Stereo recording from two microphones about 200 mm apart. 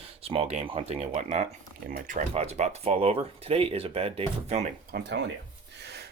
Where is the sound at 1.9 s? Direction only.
45° right (ahead or behind).